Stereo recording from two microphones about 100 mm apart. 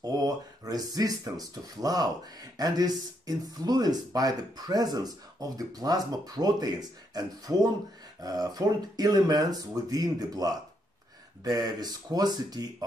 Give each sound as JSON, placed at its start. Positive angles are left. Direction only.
{"t": 0.0, "sound": "speech", "side_deg": -40}